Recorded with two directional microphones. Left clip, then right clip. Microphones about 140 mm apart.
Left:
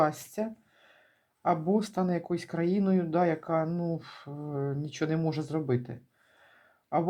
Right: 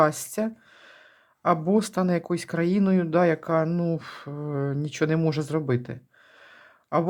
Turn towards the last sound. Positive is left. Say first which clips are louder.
# right 4 dB
turn(degrees=-35)  # may be behind; listen again after turning